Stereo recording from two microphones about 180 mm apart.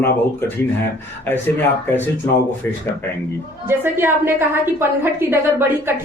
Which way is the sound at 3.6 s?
10° right (ahead or behind).